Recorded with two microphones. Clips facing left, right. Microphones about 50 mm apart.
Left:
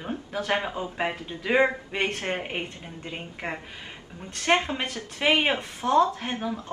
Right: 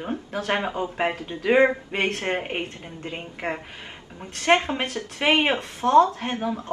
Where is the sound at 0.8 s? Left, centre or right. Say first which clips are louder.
Right 4 dB; centre.